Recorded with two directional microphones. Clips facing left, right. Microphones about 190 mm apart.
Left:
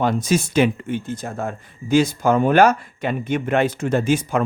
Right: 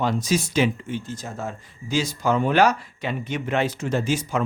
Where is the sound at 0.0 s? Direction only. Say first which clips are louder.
Left 3 dB; 55° left (ahead or behind).